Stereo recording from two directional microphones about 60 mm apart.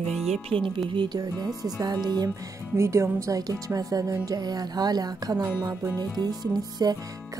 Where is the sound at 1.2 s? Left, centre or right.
Right.